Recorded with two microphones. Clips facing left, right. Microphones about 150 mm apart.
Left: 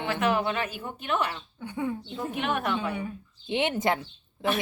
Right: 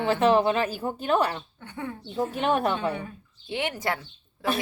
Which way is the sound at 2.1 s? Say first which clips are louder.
Right 8 dB; 35° right (ahead or behind).